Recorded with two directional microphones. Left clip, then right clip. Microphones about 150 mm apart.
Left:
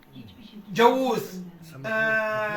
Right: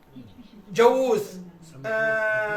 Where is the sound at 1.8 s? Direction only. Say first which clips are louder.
Even; 30° right (ahead or behind).